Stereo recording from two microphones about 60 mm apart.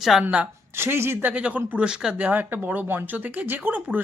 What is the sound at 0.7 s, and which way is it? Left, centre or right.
Speech, right.